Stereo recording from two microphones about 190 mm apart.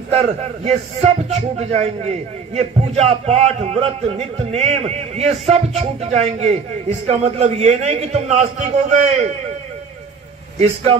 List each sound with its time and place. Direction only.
0.1 s a man's voice: 30° right (ahead or behind)